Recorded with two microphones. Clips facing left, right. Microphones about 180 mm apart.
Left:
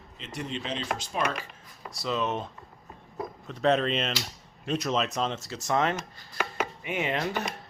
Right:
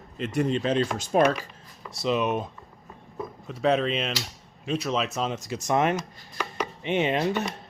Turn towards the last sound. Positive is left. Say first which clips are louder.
# right 5 dB
turn(degrees=-20)  # may be behind; listen again after turning